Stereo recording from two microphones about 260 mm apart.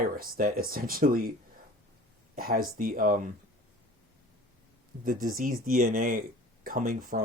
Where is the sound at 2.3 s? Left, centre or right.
Right.